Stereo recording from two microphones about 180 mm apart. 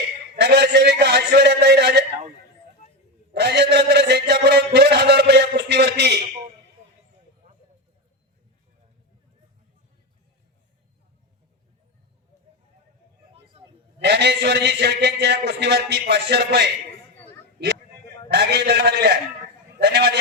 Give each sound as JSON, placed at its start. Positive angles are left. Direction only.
{"t": 0.3, "sound": "a man's voice", "side_deg": -70}
{"t": 3.3, "sound": "mantra", "side_deg": -65}
{"t": 13.3, "sound": "vehicle", "side_deg": -30}
{"t": 14.0, "sound": "a man's voice", "side_deg": -70}
{"t": 17.6, "sound": "a sound", "side_deg": -70}
{"t": 18.3, "sound": "a man's voice", "side_deg": -65}